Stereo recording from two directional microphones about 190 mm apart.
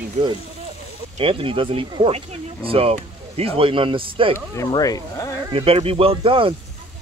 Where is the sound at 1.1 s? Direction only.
30° right (ahead or behind).